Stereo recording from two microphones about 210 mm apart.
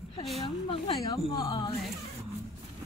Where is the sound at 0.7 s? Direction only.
20° left (ahead or behind).